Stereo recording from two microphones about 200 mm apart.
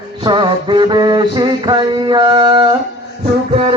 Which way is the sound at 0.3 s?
25° right (ahead or behind).